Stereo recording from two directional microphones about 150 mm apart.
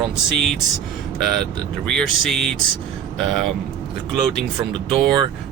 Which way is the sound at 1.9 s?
5° left (ahead or behind).